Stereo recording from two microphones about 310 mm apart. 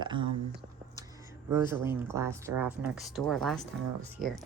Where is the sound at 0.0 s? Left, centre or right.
Centre.